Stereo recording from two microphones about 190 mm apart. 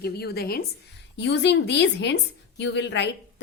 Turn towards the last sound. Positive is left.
turn(degrees=65)  # may be behind; listen again after turning